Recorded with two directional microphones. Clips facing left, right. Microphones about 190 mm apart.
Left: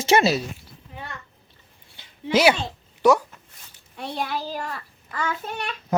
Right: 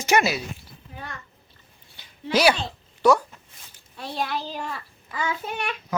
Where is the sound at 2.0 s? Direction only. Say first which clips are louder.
Left 2 dB; 20° left (ahead or behind).